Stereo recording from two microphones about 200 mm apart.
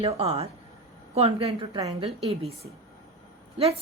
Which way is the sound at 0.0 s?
30° right (ahead or behind).